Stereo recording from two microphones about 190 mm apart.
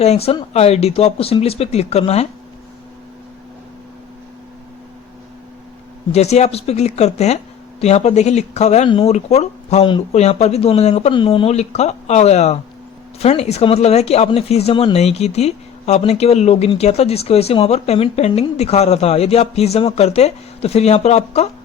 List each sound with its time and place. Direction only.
0.0 s speech: 35° left (ahead or behind)
6.1 s speech: 35° left (ahead or behind)